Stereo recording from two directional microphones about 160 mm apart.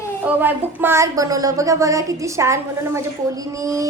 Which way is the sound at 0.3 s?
10° right (ahead or behind).